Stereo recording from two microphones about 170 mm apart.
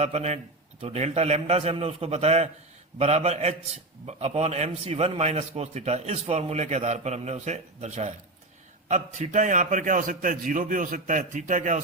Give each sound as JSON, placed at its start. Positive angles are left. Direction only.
{"t": 0.0, "sound": "a man's voice", "side_deg": -40}